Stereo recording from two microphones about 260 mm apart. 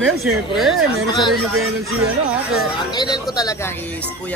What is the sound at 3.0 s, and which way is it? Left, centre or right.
Speech, centre.